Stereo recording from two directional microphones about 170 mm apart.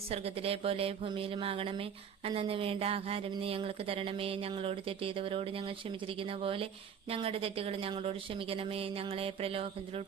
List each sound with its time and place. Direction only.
0.1 s speech: 35° right (ahead or behind)